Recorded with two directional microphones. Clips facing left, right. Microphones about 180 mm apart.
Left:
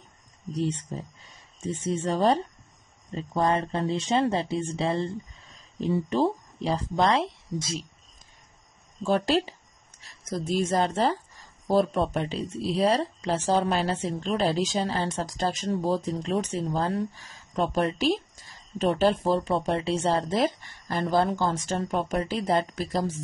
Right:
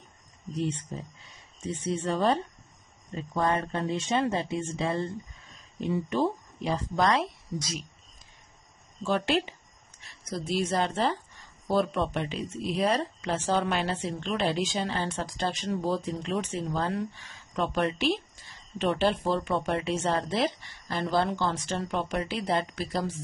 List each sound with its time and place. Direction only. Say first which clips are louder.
1.9 s a woman's voice: left 3 dB; 35° left (ahead or behind)
9.0 s a woman's voice: left 3 dB; 40° left (ahead or behind)